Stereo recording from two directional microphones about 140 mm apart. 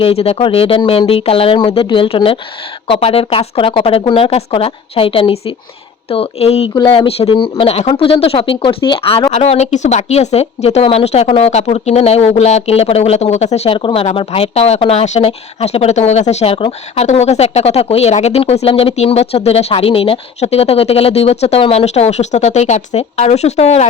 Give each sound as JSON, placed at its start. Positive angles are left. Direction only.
{"t": 0.0, "sound": "speech", "side_deg": 45}